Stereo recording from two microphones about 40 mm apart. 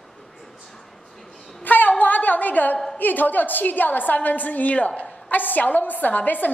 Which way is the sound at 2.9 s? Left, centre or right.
Left.